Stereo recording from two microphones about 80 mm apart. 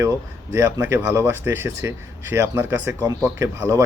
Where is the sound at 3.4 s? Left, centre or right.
Right.